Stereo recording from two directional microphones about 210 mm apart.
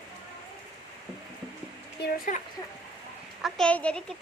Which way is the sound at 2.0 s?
45° left (ahead or behind).